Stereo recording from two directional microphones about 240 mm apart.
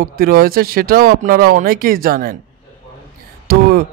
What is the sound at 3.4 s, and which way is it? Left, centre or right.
Speech, right.